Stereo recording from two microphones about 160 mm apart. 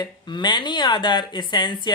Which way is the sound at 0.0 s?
30° left (ahead or behind).